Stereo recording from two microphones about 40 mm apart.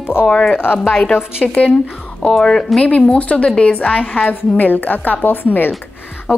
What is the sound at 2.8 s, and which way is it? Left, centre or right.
A woman's voice, left.